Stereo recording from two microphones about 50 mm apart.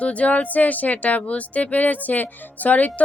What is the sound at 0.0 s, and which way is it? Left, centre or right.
Speech, left.